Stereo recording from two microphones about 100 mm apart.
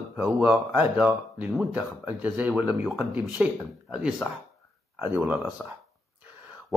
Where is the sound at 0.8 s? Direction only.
15° right (ahead or behind).